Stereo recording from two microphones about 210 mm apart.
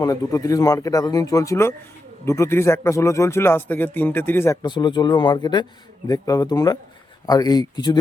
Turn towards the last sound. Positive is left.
turn(degrees=20)  # may be behind; listen again after turning